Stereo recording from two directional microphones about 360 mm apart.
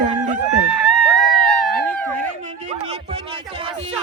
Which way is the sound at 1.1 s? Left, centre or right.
Right.